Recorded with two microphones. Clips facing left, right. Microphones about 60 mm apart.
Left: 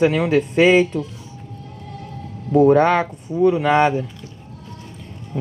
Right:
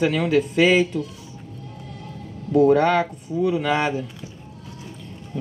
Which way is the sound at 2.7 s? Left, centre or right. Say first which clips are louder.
Left 4 dB; left.